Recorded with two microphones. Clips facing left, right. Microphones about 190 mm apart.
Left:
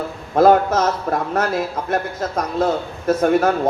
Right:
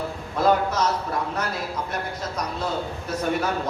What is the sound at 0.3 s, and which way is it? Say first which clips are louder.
A man's voice: left 8 dB; 50° left (ahead or behind).